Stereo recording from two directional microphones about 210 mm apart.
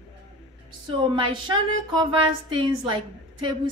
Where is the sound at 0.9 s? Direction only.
25° right (ahead or behind).